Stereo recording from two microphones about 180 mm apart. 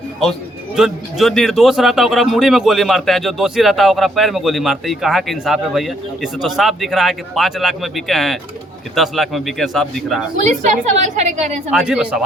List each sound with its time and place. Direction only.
0.8 s speech: centre (ahead or behind)
10.3 s a woman's voice: 40° right (ahead or behind)
11.7 s speech: 5° right (ahead or behind)